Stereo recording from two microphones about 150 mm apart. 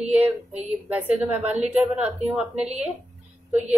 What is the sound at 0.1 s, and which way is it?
A woman's voice, 10° right (ahead or behind).